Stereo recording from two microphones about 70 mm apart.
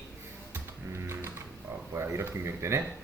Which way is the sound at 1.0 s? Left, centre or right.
Right.